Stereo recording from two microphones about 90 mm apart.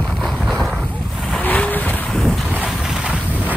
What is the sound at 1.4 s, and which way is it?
Vehicle, 20° left (ahead or behind).